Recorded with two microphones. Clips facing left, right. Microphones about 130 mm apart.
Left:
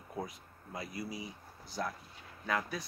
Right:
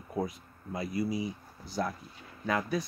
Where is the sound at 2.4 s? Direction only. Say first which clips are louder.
Right 5 dB; 10° right (ahead or behind).